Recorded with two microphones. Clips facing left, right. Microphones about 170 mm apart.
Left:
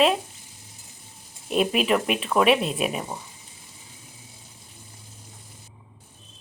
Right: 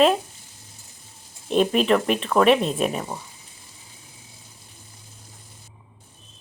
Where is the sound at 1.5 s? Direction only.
5° left (ahead or behind).